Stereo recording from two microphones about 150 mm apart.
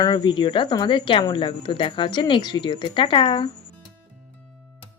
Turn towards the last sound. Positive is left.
turn(degrees=35)  # may be behind; listen again after turning